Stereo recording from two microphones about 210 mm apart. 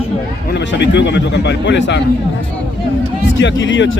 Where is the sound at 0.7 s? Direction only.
55° left (ahead or behind).